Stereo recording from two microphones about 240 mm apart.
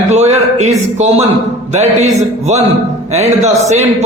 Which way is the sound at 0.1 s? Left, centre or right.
Right.